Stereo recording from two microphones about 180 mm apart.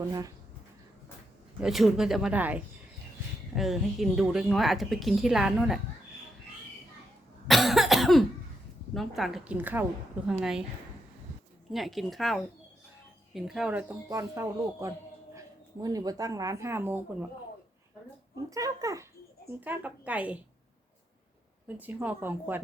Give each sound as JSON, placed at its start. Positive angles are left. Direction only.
{"t": 1.6, "sound": "speech", "side_deg": 0}
{"t": 7.4, "sound": "cough", "side_deg": 0}
{"t": 8.9, "sound": "speech", "side_deg": 0}
{"t": 11.7, "sound": "speech", "side_deg": 0}
{"t": 18.5, "sound": "a child's voice", "side_deg": -20}
{"t": 21.7, "sound": "speech", "side_deg": -10}